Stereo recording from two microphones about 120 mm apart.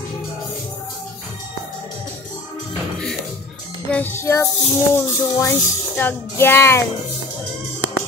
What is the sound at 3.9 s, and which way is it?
Music, 15° left (ahead or behind).